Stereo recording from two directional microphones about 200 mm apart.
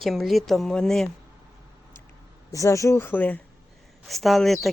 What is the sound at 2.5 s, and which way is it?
Speech, 15° left (ahead or behind).